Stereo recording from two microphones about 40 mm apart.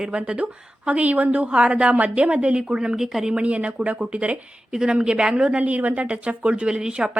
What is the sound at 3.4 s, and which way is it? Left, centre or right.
A woman's voice, right.